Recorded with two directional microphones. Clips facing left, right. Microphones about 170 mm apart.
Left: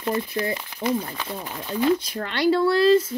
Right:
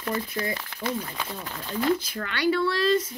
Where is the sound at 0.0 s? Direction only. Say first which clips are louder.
Left 4 dB; 20° left (ahead or behind).